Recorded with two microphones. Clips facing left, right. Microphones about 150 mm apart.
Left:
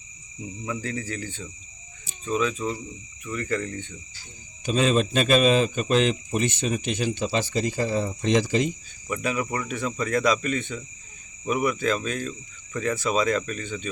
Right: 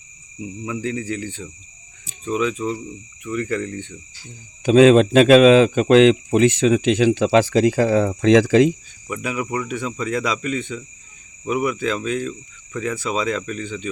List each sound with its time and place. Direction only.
0.6 s speech: 15° right (ahead or behind)
4.6 s a man's voice: 90° right
9.0 s speech: 15° right (ahead or behind)